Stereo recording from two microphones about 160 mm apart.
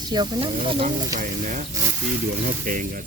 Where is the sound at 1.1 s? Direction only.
55° right (ahead or behind).